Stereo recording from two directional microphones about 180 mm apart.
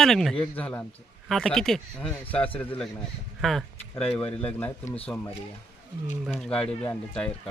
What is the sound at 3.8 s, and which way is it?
Speech, 30° left (ahead or behind).